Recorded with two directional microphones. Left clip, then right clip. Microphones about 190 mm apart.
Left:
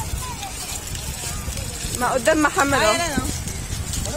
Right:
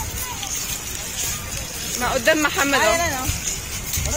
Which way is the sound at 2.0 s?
35° left (ahead or behind).